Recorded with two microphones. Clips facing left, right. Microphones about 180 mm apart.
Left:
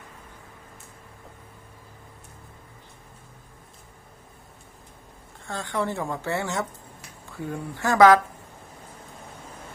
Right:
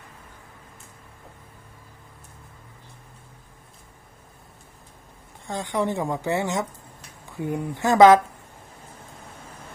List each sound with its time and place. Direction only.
5.5 s a woman's voice: 20° right (ahead or behind)